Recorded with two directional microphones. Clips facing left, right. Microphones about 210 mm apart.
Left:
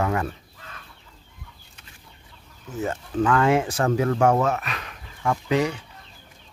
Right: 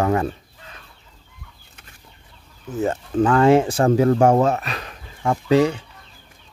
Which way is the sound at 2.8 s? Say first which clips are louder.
Right 4 dB; 35° right (ahead or behind).